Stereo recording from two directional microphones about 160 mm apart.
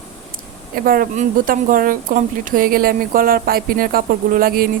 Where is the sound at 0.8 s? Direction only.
65° right (ahead or behind).